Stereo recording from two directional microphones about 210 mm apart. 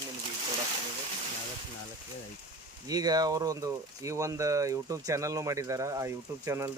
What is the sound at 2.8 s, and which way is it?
Speech, 20° right (ahead or behind).